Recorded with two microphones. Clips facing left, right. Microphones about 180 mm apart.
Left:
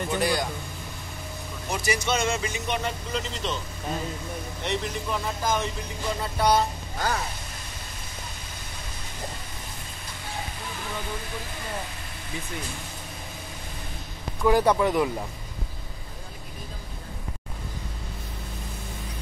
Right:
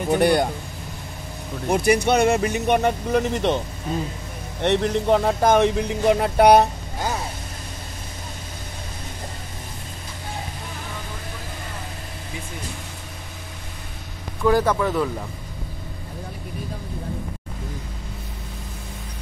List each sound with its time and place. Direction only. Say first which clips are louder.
0.1 s a man's voice: right 9 dB; 60° right (ahead or behind)
1.7 s a man's voice: right 9 dB; 60° right (ahead or behind)
14.4 s speech: right 1 dB; 15° left (ahead or behind)